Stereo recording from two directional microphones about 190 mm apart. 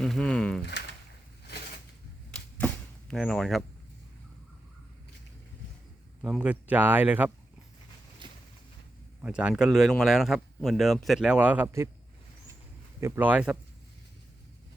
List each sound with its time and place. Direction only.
0.0 s a sound: 5° left (ahead or behind)
2.3 s arrow: 5° left (ahead or behind)
6.2 s speech: 5° right (ahead or behind)
8.2 s a sound: 25° right (ahead or behind)
9.2 s speech: 5° right (ahead or behind)
13.0 s speech: 10° right (ahead or behind)